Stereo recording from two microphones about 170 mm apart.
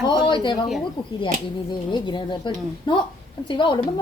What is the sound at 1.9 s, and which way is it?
A woman's voice, 30° left (ahead or behind).